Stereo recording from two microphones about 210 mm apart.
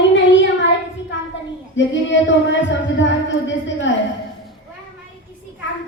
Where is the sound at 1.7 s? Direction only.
60° left (ahead or behind).